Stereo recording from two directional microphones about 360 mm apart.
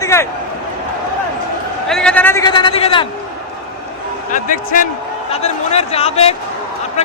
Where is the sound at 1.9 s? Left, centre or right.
Centre.